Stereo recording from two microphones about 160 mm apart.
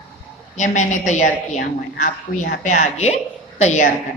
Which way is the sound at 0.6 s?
50° left (ahead or behind).